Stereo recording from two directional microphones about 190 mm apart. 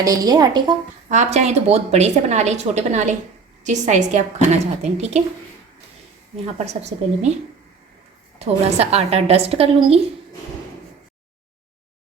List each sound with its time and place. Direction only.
0.0 s a woman's voice: 20° right (ahead or behind)
1.0 s a woman's voice: 40° right (ahead or behind)
6.4 s a woman's voice: 35° right (ahead or behind)
8.4 s a woman's voice: 35° right (ahead or behind)